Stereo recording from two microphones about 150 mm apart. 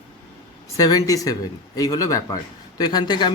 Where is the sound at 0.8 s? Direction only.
25° left (ahead or behind).